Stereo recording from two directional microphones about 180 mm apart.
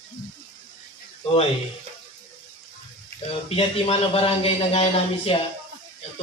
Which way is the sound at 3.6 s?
35° left (ahead or behind).